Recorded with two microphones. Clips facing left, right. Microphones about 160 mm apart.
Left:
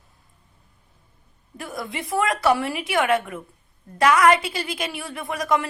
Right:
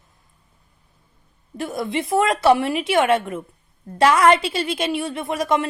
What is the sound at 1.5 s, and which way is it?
A woman's voice, 25° right (ahead or behind).